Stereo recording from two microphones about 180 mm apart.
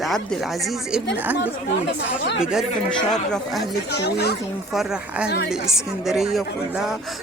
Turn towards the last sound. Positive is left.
turn(degrees=0)  # may be behind; listen again after turning